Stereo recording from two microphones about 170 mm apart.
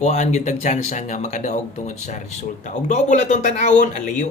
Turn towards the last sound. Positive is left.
turn(degrees=45)  # may be behind; listen again after turning